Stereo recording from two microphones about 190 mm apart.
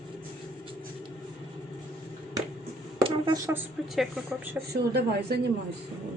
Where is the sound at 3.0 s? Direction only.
25° right (ahead or behind); by 4.2 s centre (ahead or behind).